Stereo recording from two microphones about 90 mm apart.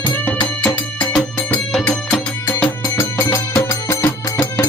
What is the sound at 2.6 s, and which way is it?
Music, 35° left (ahead or behind).